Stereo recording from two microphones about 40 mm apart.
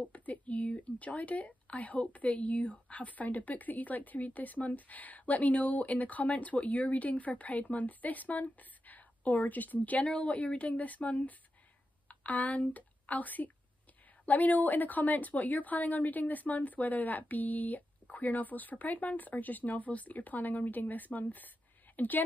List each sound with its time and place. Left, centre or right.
0.0 s speech: left